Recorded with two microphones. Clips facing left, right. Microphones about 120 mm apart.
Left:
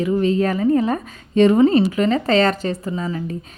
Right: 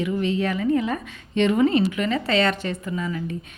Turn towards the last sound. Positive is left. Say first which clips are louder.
# left 3 dB
turn(degrees=35)  # may be behind; listen again after turning